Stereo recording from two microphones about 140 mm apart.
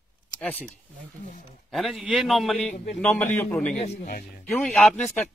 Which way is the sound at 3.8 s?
70° left (ahead or behind).